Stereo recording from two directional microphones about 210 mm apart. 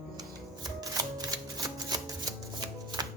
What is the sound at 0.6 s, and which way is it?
Shuffling cards, 15° right (ahead or behind).